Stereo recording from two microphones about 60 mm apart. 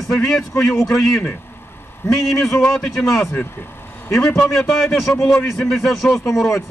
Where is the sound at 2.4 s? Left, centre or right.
Centre.